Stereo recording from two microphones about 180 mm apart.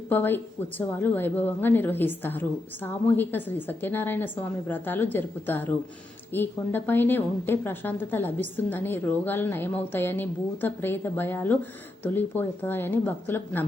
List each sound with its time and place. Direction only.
0.1 s a woman's voice: 10° left (ahead or behind)